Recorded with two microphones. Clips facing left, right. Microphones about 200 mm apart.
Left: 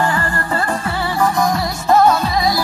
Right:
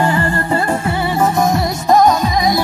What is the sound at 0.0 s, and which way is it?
Music, 25° right (ahead or behind).